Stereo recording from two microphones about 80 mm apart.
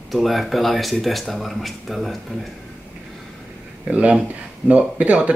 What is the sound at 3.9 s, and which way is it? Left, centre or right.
Speech, centre.